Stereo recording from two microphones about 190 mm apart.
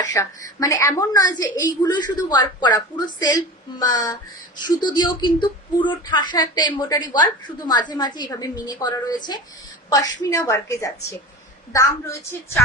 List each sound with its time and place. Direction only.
0.0 s a woman's voice: 20° left (ahead or behind)